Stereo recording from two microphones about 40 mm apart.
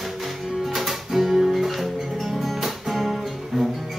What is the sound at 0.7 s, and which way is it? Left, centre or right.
Music, centre.